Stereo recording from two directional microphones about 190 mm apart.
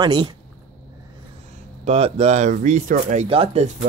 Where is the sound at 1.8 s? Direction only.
35° right (ahead or behind).